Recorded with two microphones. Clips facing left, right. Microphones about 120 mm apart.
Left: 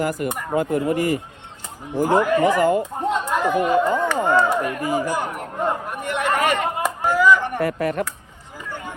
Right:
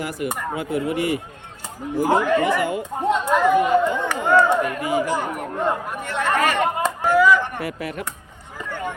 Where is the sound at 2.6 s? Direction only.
45° left (ahead or behind).